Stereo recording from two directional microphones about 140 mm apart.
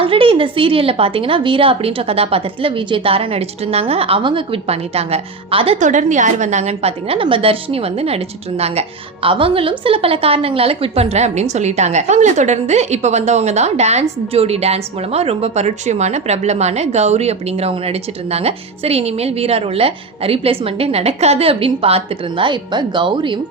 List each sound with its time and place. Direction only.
0.0 s a woman's voice: 40° right (ahead or behind)